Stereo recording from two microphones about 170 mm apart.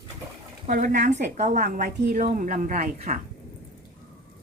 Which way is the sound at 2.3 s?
50° right (ahead or behind).